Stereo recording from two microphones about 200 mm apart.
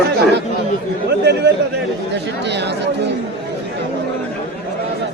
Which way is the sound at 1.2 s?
55° right (ahead or behind).